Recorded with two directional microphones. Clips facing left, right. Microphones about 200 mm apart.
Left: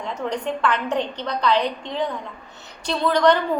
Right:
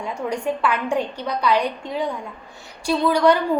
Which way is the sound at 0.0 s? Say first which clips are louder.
Right 1 dB; 10° right (ahead or behind).